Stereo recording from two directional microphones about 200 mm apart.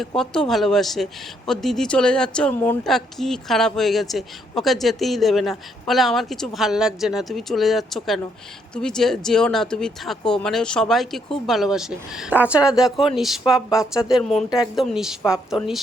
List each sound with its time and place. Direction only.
0.2 s a woman's voice: centre (ahead or behind)